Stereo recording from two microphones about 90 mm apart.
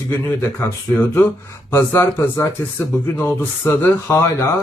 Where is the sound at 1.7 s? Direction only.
30° left (ahead or behind).